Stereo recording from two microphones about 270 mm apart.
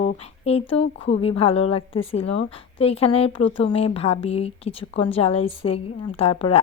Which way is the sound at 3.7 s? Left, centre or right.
Left.